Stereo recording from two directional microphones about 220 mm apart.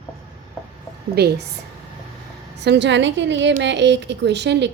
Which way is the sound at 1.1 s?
50° right (ahead or behind).